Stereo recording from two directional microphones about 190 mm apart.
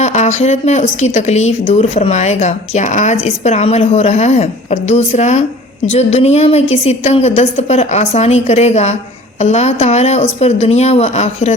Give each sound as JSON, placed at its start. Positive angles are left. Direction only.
{"t": 0.0, "sound": "speech", "side_deg": 35}